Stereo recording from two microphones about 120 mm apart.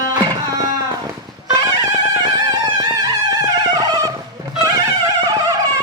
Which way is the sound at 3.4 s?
30° right (ahead or behind).